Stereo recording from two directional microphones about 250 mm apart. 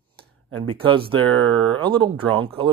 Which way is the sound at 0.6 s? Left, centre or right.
Right.